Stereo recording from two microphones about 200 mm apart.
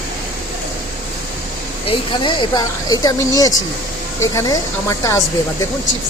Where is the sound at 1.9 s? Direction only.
25° left (ahead or behind).